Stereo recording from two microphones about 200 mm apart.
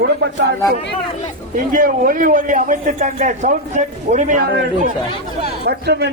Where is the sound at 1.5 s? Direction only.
45° right (ahead or behind).